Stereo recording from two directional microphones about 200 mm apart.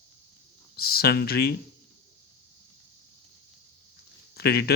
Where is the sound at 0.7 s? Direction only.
50° left (ahead or behind).